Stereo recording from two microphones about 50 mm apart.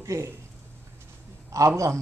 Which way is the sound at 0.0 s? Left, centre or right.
Right.